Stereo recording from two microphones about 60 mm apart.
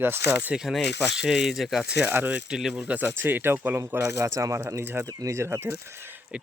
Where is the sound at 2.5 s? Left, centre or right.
Centre.